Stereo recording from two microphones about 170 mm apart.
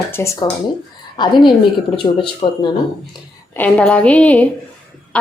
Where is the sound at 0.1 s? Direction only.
15° left (ahead or behind); by 2.6 s 30° left (ahead or behind).